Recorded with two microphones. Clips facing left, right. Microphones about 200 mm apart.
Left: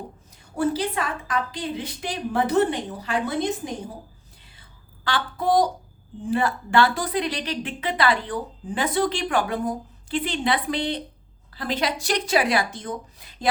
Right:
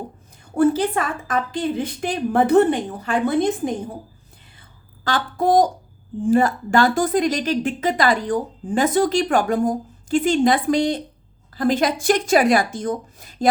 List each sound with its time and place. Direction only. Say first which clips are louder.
0.5 s a woman's voice: right 6 dB; 50° right (ahead or behind)
5.0 s a woman's voice: right 4 dB; 45° right (ahead or behind)